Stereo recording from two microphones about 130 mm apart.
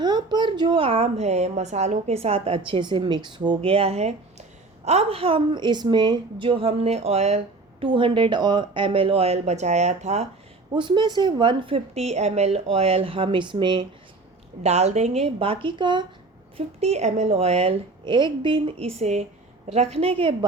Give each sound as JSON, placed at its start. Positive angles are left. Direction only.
{"t": 0.0, "sound": "a woman's voice", "side_deg": -35}
{"t": 7.9, "sound": "a woman's voice", "side_deg": -40}
{"t": 10.8, "sound": "a woman's voice", "side_deg": -35}
{"t": 14.6, "sound": "a woman's voice", "side_deg": -60}
{"t": 16.6, "sound": "a woman's voice", "side_deg": -55}
{"t": 18.0, "sound": "a woman's voice", "side_deg": -35}